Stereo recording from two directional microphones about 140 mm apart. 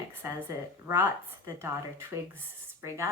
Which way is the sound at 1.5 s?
20° right (ahead or behind).